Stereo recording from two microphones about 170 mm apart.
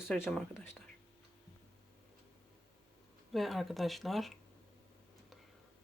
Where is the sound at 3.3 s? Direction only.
Centre (ahead or behind).